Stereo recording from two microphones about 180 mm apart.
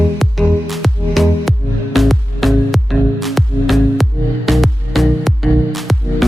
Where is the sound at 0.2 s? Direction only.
Centre (ahead or behind).